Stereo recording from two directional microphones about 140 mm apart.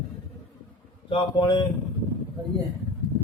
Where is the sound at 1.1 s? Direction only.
35° left (ahead or behind).